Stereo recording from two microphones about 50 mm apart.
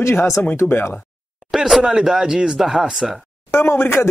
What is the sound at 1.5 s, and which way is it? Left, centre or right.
Speech, centre.